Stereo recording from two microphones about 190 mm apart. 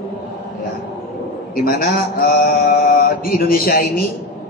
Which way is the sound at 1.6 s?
50° left (ahead or behind).